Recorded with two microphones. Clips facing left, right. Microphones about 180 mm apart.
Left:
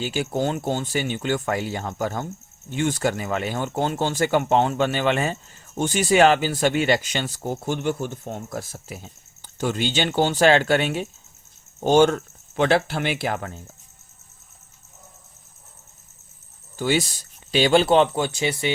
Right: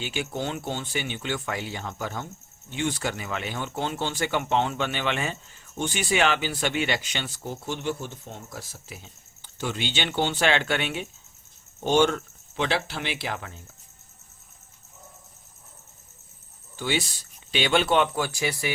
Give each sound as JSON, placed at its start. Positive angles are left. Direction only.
{"t": 0.0, "sound": "speech", "side_deg": 40}
{"t": 16.7, "sound": "speech", "side_deg": 45}